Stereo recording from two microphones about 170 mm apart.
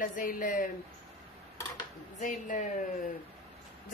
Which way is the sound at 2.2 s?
50° left (ahead or behind).